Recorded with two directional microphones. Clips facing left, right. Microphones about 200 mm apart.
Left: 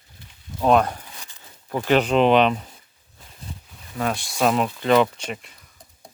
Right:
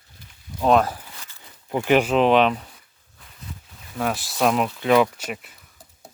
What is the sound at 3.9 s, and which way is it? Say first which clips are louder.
Speech: even; centre (ahead or behind).